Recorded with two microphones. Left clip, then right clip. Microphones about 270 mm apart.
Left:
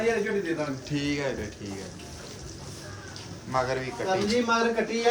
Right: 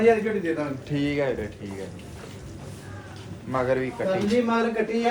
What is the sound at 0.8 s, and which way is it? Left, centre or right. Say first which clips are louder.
Speech: right 6 dB; centre.